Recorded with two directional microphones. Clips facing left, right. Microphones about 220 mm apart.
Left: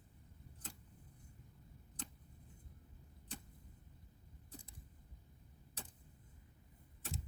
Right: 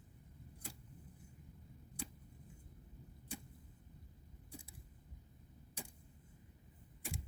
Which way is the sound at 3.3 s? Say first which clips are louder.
Right 3 dB; 10° right (ahead or behind).